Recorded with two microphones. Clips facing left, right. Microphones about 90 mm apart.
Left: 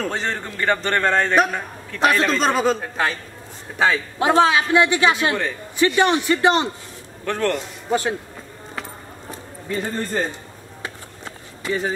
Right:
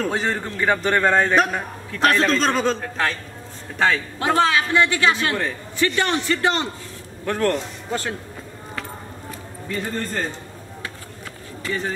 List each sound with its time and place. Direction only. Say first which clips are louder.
0.0 s a man's voice: right 2 dB; 5° right (ahead or behind)
4.2 s a man's voice: left 3 dB; 20° left (ahead or behind)
7.2 s a man's voice: right 1 dB; 5° right (ahead or behind)
7.9 s a man's voice: left 5 dB; 20° left (ahead or behind)
9.3 s a sound: left 2 dB; 25° left (ahead or behind)
11.6 s speech: left 3 dB; 15° left (ahead or behind)